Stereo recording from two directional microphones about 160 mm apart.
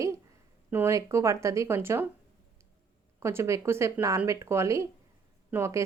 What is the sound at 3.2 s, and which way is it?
Speech, 15° right (ahead or behind).